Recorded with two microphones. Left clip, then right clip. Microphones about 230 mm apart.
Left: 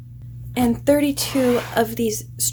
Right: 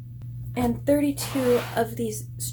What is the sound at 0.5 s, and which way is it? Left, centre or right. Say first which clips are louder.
A woman's voice: left 5 dB; left.